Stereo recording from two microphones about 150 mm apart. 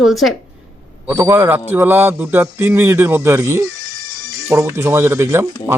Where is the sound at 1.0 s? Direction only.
20° right (ahead or behind).